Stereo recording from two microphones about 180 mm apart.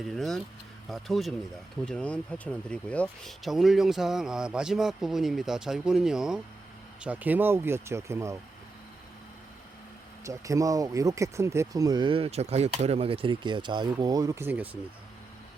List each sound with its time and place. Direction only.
0.0 s speech: centre (ahead or behind); by 8.4 s 15° right (ahead or behind)
10.2 s speech: 20° right (ahead or behind)